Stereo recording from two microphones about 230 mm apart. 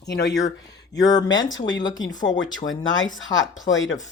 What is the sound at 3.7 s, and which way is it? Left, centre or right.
Speech, left.